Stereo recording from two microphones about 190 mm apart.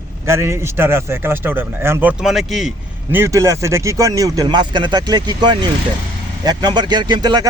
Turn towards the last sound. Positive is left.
turn(degrees=-20)  # may be behind; listen again after turning